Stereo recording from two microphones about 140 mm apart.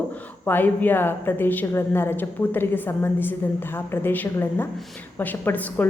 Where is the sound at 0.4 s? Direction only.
15° left (ahead or behind).